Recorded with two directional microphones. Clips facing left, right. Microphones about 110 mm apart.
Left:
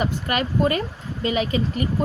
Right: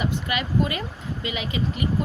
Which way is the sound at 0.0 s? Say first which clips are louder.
Left 3 dB; 45° left (ahead or behind).